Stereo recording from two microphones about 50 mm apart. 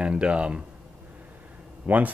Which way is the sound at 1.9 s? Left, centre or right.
Right.